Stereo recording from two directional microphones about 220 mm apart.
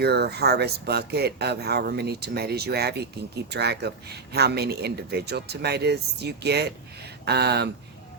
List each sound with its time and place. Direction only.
0.0 s speech: 45° right (ahead or behind)